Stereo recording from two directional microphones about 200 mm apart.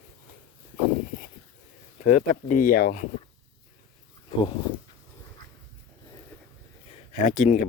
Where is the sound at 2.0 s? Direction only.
40° left (ahead or behind).